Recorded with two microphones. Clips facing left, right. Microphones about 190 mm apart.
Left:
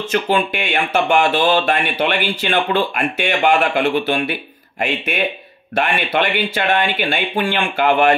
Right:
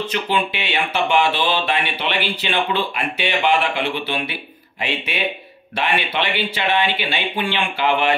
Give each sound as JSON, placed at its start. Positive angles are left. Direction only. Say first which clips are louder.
{"t": 0.1, "sound": "speech", "louder": "left 9 dB", "side_deg": 45}